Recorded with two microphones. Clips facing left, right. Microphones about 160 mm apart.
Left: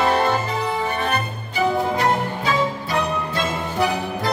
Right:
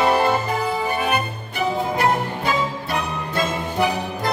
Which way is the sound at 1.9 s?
55° right (ahead or behind).